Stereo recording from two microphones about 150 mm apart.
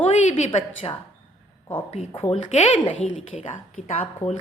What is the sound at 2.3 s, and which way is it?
A woman's voice, 45° left (ahead or behind).